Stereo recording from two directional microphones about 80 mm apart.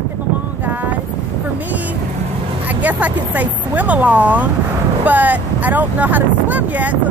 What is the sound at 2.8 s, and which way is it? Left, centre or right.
Speech, right.